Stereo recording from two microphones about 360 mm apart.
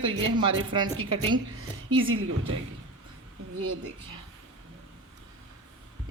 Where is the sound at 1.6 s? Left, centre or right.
Right.